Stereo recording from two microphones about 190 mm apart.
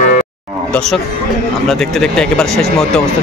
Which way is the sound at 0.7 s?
5° left (ahead or behind).